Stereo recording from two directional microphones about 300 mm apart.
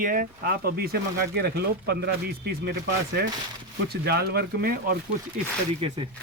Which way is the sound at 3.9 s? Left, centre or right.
Right.